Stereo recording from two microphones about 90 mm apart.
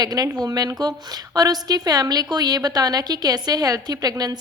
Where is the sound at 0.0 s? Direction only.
45° right (ahead or behind).